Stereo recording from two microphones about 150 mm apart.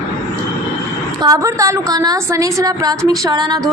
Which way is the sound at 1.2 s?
20° right (ahead or behind).